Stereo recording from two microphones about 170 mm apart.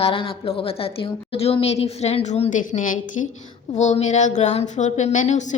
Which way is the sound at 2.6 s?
50° left (ahead or behind).